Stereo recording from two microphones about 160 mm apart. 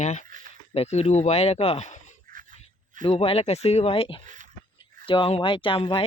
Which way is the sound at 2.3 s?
55° right (ahead or behind).